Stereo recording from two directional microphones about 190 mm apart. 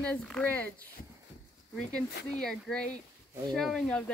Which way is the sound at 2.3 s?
5° left (ahead or behind).